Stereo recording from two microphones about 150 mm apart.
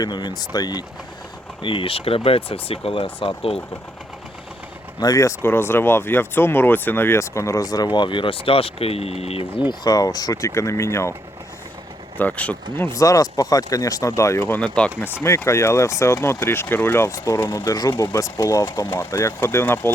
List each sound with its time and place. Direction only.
0.0 s speech: 30° left (ahead or behind)
4.9 s speech: 25° left (ahead or behind); by 9.5 s 45° left (ahead or behind)
9.6 s speech: 30° left (ahead or behind)
12.1 s speech: 10° left (ahead or behind)
12.8 s speech: 20° left (ahead or behind)